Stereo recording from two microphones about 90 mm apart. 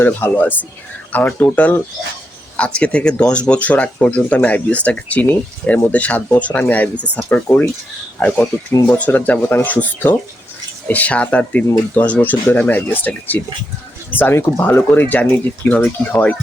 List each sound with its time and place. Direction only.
0.0 s speech: 20° left (ahead or behind)